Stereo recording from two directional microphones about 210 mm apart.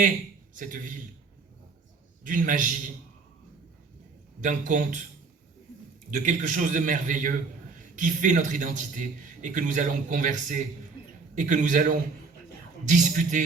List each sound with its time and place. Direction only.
0.5 s a man's voice: 40° right (ahead or behind)
2.2 s a man's voice: 40° right (ahead or behind)
4.4 s a man's voice: 35° right (ahead or behind)
6.1 s a man's voice: 35° right (ahead or behind)